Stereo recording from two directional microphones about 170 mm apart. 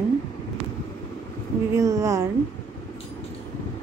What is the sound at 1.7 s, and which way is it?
Speech, 20° right (ahead or behind).